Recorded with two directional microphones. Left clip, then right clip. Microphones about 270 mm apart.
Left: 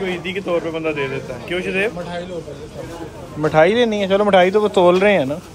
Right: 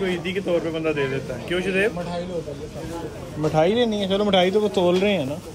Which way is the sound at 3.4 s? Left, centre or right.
Left.